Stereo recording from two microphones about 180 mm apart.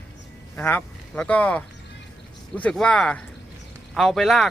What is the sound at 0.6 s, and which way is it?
Speech, 10° left (ahead or behind).